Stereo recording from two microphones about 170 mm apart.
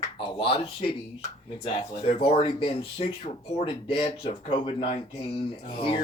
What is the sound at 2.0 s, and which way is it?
Speech, 35° left (ahead or behind).